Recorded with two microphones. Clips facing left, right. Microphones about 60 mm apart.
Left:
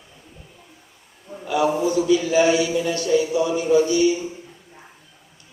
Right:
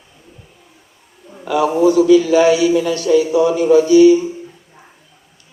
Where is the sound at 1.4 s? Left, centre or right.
Right.